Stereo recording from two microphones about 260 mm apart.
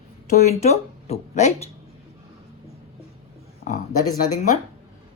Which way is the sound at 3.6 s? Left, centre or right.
Left.